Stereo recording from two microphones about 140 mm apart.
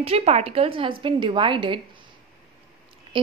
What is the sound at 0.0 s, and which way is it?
A woman's voice, 45° right (ahead or behind).